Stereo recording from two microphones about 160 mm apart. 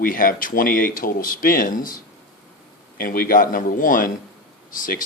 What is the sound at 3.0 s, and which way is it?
A man's voice, 65° left (ahead or behind).